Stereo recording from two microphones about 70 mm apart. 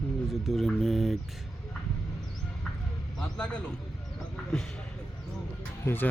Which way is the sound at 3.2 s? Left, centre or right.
Centre.